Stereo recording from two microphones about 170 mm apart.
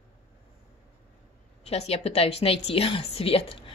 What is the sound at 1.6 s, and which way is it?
A woman's voice, 35° left (ahead or behind).